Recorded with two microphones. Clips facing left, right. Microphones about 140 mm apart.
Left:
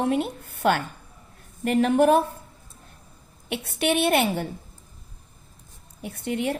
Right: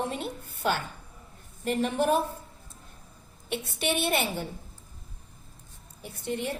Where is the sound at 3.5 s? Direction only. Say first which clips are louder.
Left 5 dB; 60° left (ahead or behind).